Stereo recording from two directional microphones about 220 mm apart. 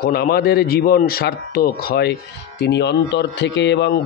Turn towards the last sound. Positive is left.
turn(degrees=50)  # may be behind; listen again after turning